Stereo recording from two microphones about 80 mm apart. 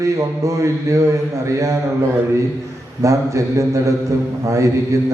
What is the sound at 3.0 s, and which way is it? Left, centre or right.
Mantra, right.